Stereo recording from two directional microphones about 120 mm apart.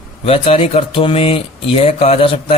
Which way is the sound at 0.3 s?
55° left (ahead or behind).